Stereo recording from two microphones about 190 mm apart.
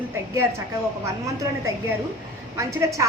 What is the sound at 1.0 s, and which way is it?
A woman's voice, 15° right (ahead or behind).